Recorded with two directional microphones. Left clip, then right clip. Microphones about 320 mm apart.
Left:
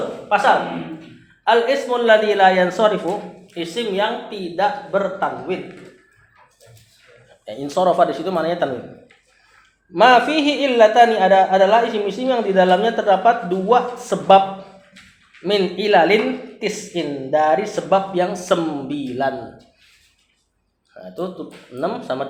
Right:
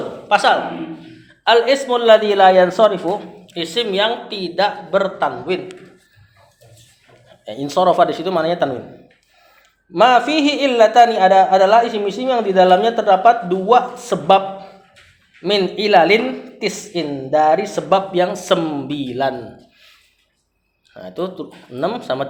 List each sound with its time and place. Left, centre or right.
0.3 s speech: right
1.5 s speech: right
3.4 s speech: right
7.4 s speech: right
9.9 s speech: right
15.4 s speech: right
20.9 s speech: right